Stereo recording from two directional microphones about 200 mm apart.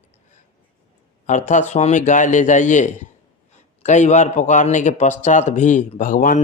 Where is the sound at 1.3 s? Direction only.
35° left (ahead or behind).